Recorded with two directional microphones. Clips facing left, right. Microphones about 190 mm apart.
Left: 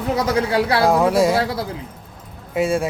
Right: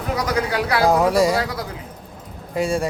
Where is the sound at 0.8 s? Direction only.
Centre (ahead or behind).